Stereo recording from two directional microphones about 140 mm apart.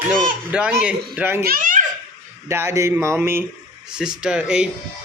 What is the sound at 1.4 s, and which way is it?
Babbling, 85° right.